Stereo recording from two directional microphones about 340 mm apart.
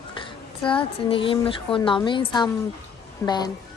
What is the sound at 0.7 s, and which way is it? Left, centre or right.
A woman's voice, centre.